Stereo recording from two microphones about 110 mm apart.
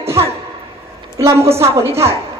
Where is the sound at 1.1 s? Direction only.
25° right (ahead or behind).